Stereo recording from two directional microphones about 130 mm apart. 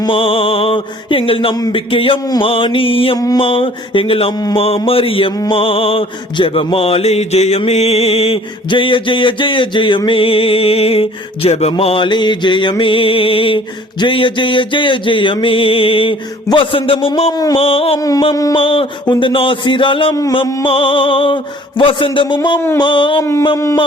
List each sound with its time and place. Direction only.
0.0 s mantra: 45° left (ahead or behind)
3.2 s a sound: 30° left (ahead or behind)
3.4 s mantra: 45° left (ahead or behind)
17.3 s mantra: 30° left (ahead or behind)
17.6 s mantra: 50° left (ahead or behind)
23.2 s a sound: 20° left (ahead or behind)